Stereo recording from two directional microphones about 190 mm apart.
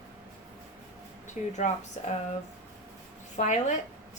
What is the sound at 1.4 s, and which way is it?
Speech, 40° left (ahead or behind).